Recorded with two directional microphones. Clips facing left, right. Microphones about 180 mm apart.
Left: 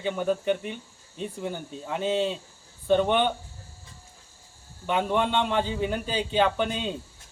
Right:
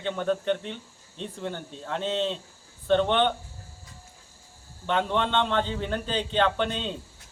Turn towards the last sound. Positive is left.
turn(degrees=10)  # may be behind; listen again after turning